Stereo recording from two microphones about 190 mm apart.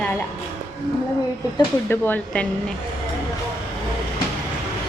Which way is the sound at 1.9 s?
10° left (ahead or behind).